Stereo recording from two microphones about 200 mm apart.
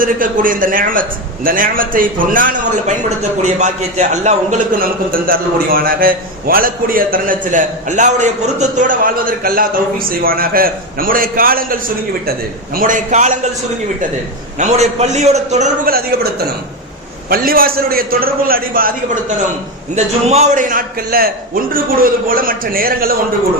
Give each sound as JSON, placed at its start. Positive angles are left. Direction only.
{"t": 0.0, "sound": "a man's voice", "side_deg": -45}
{"t": 14.6, "sound": "a man's voice", "side_deg": -35}
{"t": 15.9, "sound": "a man's voice", "side_deg": -50}
{"t": 20.2, "sound": "a man's voice", "side_deg": -35}